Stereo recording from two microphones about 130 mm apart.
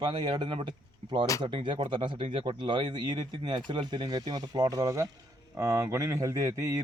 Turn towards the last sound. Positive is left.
turn(degrees=-25)  # may be behind; listen again after turning